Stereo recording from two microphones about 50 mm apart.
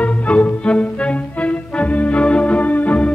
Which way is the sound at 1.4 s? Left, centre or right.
Left.